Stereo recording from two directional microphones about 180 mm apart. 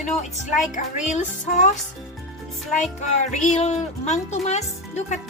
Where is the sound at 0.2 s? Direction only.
45° left (ahead or behind).